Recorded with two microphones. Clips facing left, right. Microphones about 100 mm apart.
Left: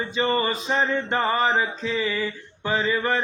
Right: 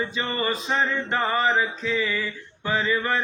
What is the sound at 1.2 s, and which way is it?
Mantra, 35° left (ahead or behind).